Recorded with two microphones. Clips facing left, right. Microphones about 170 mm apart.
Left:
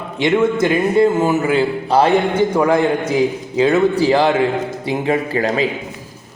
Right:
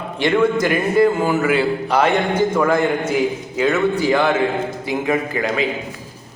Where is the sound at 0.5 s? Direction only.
25° left (ahead or behind).